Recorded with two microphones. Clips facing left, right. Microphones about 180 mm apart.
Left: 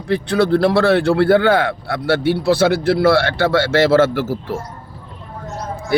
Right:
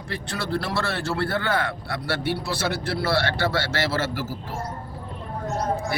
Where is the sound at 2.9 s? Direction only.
70° left (ahead or behind).